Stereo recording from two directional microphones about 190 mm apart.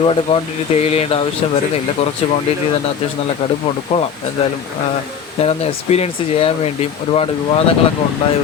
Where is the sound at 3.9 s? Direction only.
35° left (ahead or behind).